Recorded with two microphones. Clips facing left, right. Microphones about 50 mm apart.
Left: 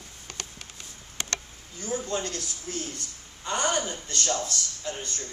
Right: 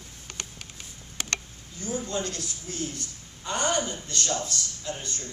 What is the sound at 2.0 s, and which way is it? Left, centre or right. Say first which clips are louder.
Speech: even; left.